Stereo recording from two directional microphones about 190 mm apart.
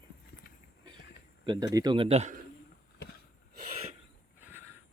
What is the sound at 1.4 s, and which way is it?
Speech, 20° right (ahead or behind).